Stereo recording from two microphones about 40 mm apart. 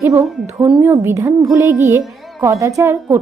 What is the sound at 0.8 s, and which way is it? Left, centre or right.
Speech, right.